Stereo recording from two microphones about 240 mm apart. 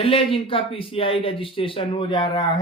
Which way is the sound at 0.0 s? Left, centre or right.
Left.